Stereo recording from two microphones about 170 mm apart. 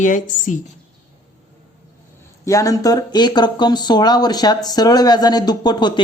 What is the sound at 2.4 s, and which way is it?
Speech, 20° left (ahead or behind).